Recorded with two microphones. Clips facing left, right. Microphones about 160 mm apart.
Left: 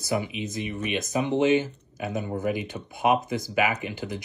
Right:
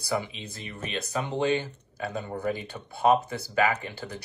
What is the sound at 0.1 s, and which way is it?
Speech, 15° left (ahead or behind).